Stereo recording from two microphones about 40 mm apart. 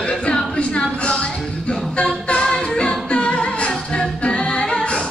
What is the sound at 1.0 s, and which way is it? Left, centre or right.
Music, left.